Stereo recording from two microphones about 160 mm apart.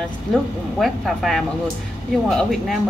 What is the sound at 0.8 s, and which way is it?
Speech, centre (ahead or behind).